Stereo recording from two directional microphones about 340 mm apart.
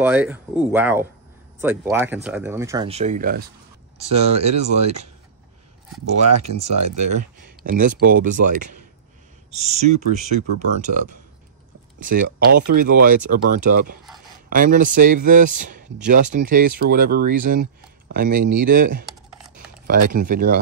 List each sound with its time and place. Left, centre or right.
0.0 s speech: centre
6.2 s speech: right
7.4 s a sound: right
8.1 s speech: right
19.5 s computer keyboard: right
20.2 s speech: right